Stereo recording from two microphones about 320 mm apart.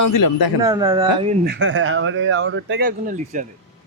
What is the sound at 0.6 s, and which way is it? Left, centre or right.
Speech, centre.